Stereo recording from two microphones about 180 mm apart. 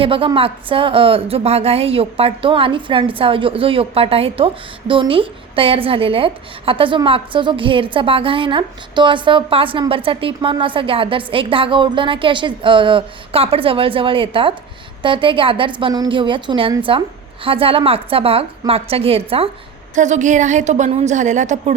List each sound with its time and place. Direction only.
0.0 s a woman's voice: 30° right (ahead or behind)
20.0 s a woman's voice: 40° right (ahead or behind)